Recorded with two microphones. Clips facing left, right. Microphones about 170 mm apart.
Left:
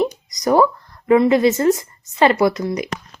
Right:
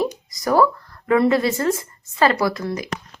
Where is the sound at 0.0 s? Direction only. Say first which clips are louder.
Left 3 dB; 20° left (ahead or behind).